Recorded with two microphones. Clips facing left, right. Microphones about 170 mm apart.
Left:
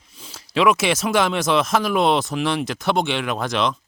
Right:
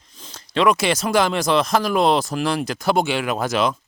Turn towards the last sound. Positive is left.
turn(degrees=-5)  # may be behind; listen again after turning